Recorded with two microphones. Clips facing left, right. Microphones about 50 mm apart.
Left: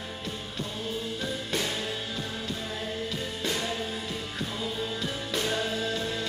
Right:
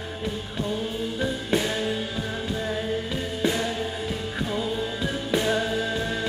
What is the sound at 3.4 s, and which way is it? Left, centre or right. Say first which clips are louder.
Music: right 7 dB; centre.